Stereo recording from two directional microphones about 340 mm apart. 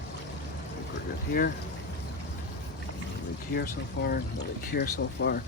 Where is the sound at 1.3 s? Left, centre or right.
Left.